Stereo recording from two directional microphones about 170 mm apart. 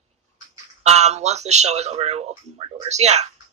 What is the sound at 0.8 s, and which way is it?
Speech, 40° right (ahead or behind).